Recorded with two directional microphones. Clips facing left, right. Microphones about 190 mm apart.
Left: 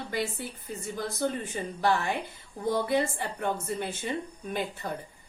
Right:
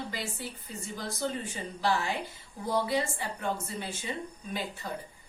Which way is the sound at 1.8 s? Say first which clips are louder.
Left 2 dB; 55° left (ahead or behind).